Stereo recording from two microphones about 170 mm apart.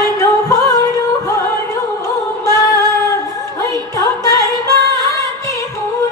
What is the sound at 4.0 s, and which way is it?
Music, 20° left (ahead or behind).